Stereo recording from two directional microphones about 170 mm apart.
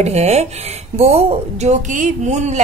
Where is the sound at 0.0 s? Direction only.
40° right (ahead or behind).